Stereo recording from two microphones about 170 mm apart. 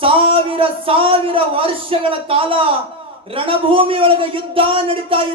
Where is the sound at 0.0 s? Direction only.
30° right (ahead or behind).